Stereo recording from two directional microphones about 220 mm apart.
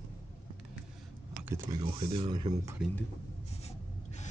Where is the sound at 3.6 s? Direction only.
30° left (ahead or behind).